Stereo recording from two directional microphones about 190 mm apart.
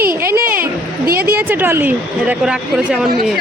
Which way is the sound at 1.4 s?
10° right (ahead or behind).